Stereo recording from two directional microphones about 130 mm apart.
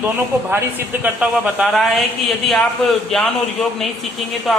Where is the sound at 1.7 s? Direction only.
Centre (ahead or behind).